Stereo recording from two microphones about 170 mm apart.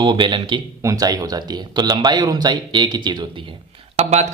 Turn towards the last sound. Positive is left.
turn(degrees=-40)  # may be behind; listen again after turning